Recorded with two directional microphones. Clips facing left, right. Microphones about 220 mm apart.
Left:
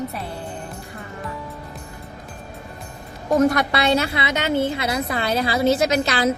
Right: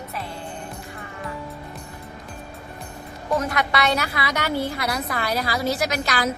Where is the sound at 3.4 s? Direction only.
40° left (ahead or behind).